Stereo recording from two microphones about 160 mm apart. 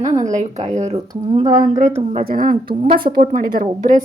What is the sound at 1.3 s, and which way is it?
Speech, 30° right (ahead or behind).